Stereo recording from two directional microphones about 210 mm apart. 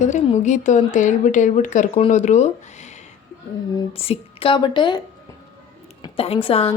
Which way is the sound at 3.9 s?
25° left (ahead or behind).